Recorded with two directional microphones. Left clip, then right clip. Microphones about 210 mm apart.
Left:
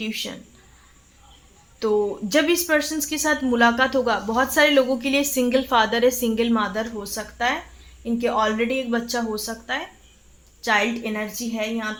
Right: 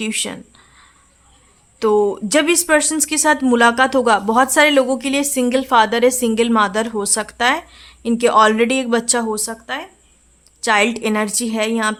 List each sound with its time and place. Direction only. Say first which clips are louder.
0.0 s speech: right 6 dB; 35° right (ahead or behind)
1.8 s speech: right 6 dB; 35° right (ahead or behind)
10.6 s speech: right 6 dB; 40° right (ahead or behind)